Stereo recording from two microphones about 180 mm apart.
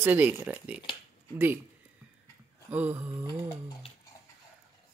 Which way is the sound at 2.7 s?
10° right (ahead or behind).